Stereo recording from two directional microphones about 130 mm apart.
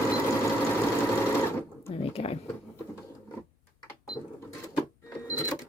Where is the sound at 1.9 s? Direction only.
50° left (ahead or behind).